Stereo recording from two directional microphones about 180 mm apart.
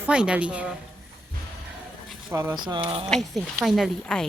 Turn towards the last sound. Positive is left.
turn(degrees=0)  # may be behind; listen again after turning